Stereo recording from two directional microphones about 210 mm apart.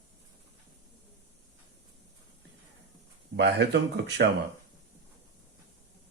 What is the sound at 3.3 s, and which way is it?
Speech, 55° right (ahead or behind).